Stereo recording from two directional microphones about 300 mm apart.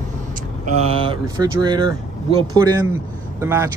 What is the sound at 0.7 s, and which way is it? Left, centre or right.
Speech, centre.